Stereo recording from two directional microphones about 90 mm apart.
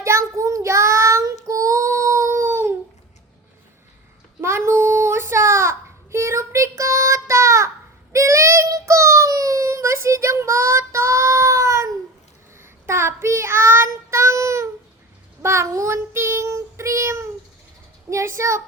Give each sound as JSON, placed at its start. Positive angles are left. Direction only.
{"t": 0.0, "sound": "child singing", "side_deg": -30}
{"t": 4.4, "sound": "child singing", "side_deg": -30}
{"t": 18.1, "sound": "a sound", "side_deg": -35}